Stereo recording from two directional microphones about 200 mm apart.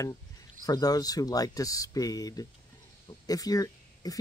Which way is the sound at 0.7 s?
20° left (ahead or behind).